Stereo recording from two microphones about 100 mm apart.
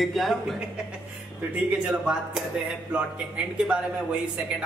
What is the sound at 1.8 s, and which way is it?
Speech, 10° right (ahead or behind).